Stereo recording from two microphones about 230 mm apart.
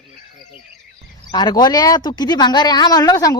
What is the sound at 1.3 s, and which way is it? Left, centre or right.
Speech, centre.